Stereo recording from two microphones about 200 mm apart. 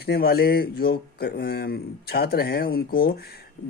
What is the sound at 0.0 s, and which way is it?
Speech, 50° left (ahead or behind).